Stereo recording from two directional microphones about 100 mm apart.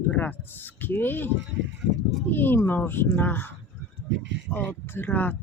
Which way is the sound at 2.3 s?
20° left (ahead or behind).